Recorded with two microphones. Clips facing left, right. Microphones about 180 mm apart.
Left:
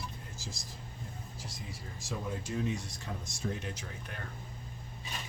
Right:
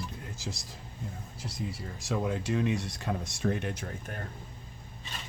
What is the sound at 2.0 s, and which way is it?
Speech, 75° right (ahead or behind).